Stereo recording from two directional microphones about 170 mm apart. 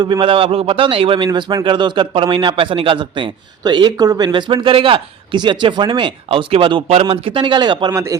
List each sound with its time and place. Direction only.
0.0 s a man's voice: 30° right (ahead or behind)